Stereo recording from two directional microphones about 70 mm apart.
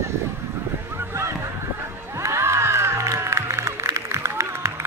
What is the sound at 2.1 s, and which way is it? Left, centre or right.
Music, right.